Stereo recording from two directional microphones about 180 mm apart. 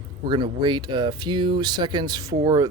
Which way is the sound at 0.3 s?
25° right (ahead or behind).